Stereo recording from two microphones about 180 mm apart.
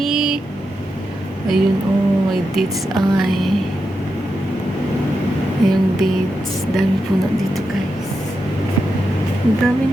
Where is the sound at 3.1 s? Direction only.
Centre (ahead or behind).